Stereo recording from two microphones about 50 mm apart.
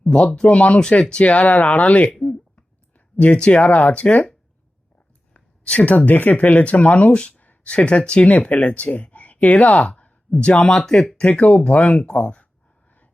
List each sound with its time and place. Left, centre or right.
0.1 s speech: centre
0.4 s speech: left
3.2 s speech: left
5.3 s a sound: left
6.1 s speech: left
10.8 s speech: centre
11.2 s speech: left